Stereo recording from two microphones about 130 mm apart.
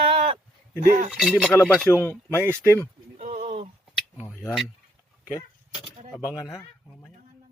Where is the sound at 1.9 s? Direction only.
20° left (ahead or behind).